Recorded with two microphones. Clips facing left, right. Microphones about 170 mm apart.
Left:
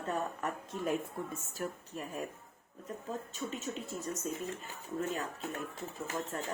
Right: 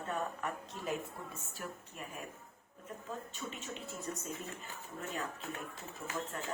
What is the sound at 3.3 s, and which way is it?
Speech, 40° left (ahead or behind).